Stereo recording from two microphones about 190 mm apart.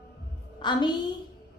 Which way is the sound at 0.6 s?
25° left (ahead or behind).